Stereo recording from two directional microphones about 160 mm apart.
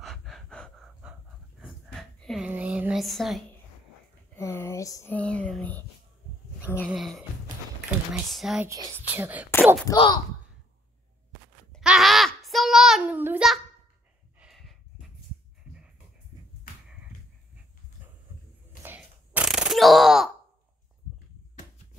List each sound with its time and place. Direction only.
0.0 s gasp: centre (ahead or behind)
1.9 s a sound: 5° left (ahead or behind)
2.5 s a sound: 10° right (ahead or behind)
4.4 s speech: 15° left (ahead or behind)
5.1 s speech: 5° left (ahead or behind)
6.9 s speech: centre (ahead or behind)
8.6 s speech: 20° right (ahead or behind)
9.1 s speech: 10° right (ahead or behind)
9.9 s speech: 30° left (ahead or behind)
11.7 s a sound: centre (ahead or behind)
14.4 s snort: centre (ahead or behind)
18.8 s a sound: 10° right (ahead or behind)